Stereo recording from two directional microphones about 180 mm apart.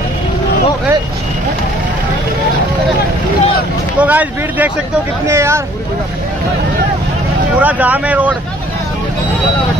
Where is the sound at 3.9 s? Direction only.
10° right (ahead or behind).